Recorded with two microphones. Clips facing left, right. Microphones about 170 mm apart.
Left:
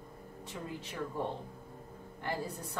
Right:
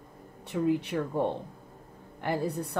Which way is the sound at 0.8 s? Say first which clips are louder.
Right 8 dB; 65° right (ahead or behind).